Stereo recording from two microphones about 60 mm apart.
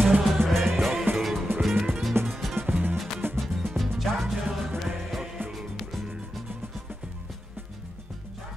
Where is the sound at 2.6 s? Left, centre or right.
Right.